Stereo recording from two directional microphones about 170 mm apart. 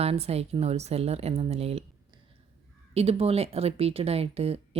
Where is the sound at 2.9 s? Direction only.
35° right (ahead or behind).